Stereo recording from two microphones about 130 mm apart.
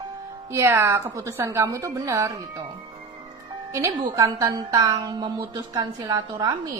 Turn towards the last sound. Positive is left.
turn(degrees=-35)  # may be behind; listen again after turning